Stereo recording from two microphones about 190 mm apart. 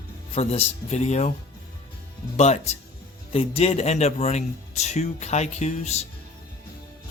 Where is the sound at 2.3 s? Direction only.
35° left (ahead or behind).